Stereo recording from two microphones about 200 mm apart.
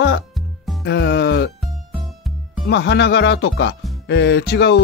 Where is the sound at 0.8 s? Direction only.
60° left (ahead or behind).